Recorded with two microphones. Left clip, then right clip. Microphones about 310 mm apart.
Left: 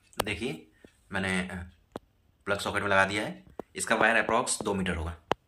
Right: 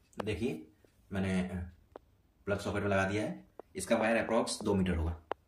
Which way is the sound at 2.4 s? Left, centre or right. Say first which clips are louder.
Left 5 dB; left.